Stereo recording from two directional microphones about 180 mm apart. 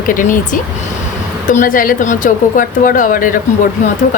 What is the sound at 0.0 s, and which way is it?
A woman's voice, 45° left (ahead or behind).